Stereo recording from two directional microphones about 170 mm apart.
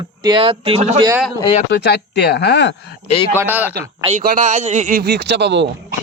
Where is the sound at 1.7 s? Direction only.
80° left.